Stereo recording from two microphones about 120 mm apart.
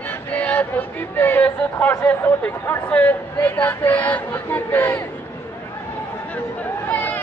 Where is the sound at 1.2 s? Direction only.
15° left (ahead or behind).